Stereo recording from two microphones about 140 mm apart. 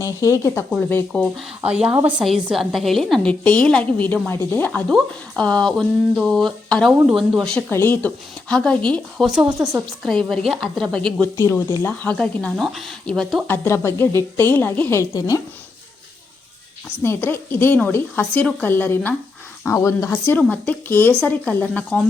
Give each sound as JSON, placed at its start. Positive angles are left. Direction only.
{"t": 0.2, "sound": "speech", "side_deg": 20}
{"t": 0.9, "sound": "speech", "side_deg": 10}
{"t": 1.6, "sound": "a woman's voice", "side_deg": -10}
{"t": 7.7, "sound": "a woman's voice", "side_deg": 15}
{"t": 11.7, "sound": "a woman's voice", "side_deg": 15}
{"t": 13.7, "sound": "speech", "side_deg": 15}
{"t": 17.0, "sound": "speech", "side_deg": 15}